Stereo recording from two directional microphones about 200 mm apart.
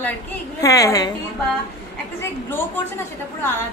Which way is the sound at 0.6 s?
15° left (ahead or behind).